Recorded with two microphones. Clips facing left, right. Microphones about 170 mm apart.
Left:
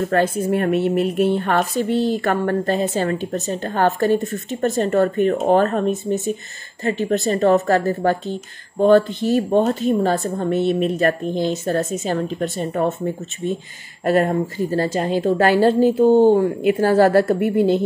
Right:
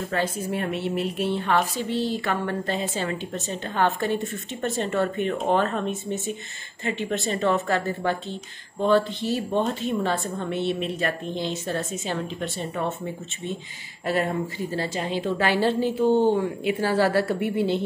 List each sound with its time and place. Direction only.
0.1 s a woman's voice: 55° left (ahead or behind)